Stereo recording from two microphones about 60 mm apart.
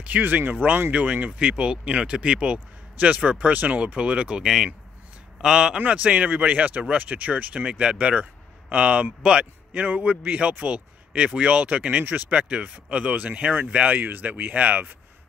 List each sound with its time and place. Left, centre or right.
0.0 s a man's voice: right; by 5.8 s centre
6.0 s speech: right
12.0 s speech: right
12.3 s speech: centre